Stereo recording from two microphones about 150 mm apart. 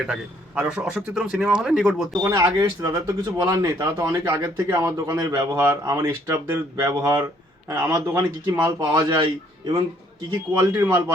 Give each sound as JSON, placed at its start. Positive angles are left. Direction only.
{"t": 0.1, "sound": "speech", "side_deg": -5}
{"t": 2.2, "sound": "a man's voice", "side_deg": -20}
{"t": 10.6, "sound": "a man's voice", "side_deg": -15}